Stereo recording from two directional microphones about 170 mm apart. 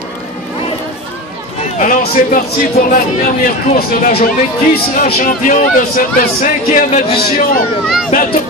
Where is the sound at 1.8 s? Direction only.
50° left (ahead or behind).